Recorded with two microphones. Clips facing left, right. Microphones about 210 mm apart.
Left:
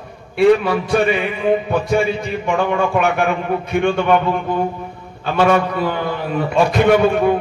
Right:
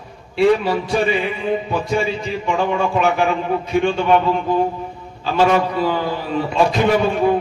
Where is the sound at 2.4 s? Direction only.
55° left (ahead or behind).